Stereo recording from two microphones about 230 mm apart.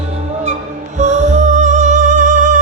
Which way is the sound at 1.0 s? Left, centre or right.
Right.